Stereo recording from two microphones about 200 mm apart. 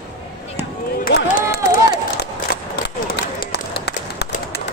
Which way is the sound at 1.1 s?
50° left (ahead or behind).